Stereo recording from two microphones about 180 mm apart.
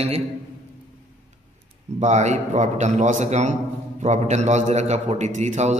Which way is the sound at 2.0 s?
40° right (ahead or behind).